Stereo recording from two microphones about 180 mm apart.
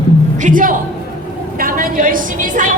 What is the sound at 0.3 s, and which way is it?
A man's voice, 45° right (ahead or behind).